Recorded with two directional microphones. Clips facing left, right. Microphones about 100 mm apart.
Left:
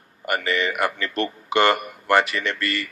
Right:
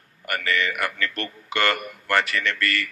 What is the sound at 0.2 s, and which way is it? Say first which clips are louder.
A man's voice: left 2 dB; 20° left (ahead or behind).